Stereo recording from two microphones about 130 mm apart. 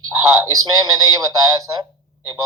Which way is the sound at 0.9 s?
25° right (ahead or behind).